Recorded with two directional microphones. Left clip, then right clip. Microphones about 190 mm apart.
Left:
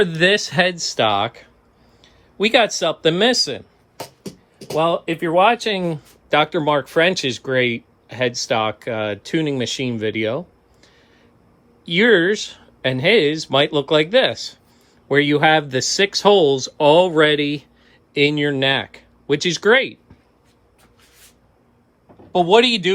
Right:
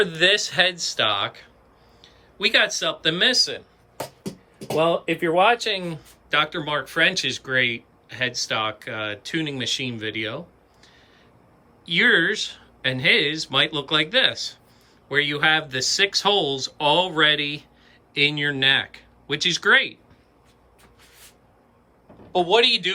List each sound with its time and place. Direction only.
0.0 s speech: 25° left (ahead or behind)
4.7 s speech: 20° left (ahead or behind)
11.9 s speech: 15° left (ahead or behind)
22.3 s speech: 35° left (ahead or behind)